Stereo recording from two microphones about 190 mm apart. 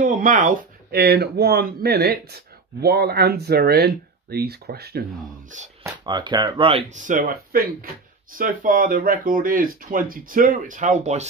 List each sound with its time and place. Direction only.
0.0 s speech: 45° right (ahead or behind)
5.5 s speech: 40° right (ahead or behind)
5.9 s speech: 25° right (ahead or behind)
6.9 s speech: 40° right (ahead or behind)